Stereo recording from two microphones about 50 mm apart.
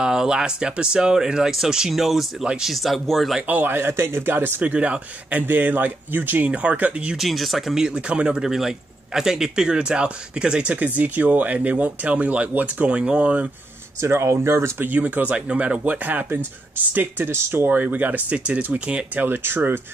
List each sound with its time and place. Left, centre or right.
0.0 s speech: centre
3.4 s speech: right
4.6 s speech: right
5.5 s speech: right
7.2 s speech: centre; by 8.4 s right
8.4 s speech: centre
9.8 s speech: right
11.0 s speech: right
14.0 s speech: right
14.9 s speech: right
19.2 s speech: right